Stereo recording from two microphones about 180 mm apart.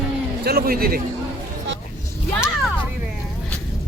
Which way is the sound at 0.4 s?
60° right (ahead or behind).